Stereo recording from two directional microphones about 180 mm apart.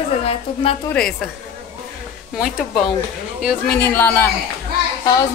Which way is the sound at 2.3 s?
5° right (ahead or behind).